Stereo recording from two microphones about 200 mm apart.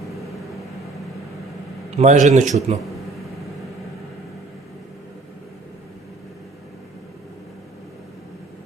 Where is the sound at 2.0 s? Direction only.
35° right (ahead or behind).